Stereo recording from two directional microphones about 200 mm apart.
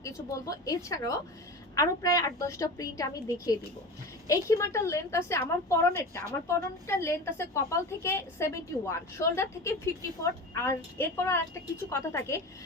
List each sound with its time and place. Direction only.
0.0 s a woman's voice: 15° left (ahead or behind)